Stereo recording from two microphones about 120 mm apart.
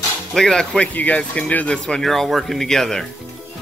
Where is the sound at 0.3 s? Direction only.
5° left (ahead or behind).